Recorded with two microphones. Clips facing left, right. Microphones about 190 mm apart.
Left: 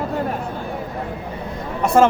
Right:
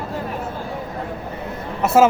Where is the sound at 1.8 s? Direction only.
5° right (ahead or behind).